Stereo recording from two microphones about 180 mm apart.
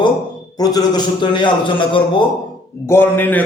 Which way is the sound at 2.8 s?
10° left (ahead or behind).